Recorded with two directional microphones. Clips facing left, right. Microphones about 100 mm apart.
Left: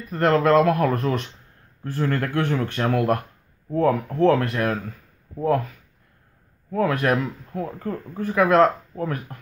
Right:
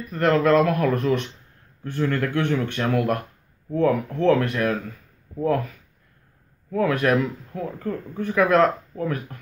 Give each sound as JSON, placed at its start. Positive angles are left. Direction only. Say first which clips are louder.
{"t": 0.1, "sound": "speech", "louder": "left 1 dB", "side_deg": 30}
{"t": 6.7, "sound": "speech", "louder": "right 1 dB", "side_deg": 30}